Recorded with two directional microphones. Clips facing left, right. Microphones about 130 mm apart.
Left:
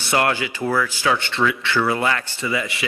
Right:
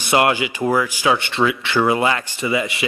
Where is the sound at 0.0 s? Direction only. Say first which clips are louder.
Right 3 dB; 20° right (ahead or behind).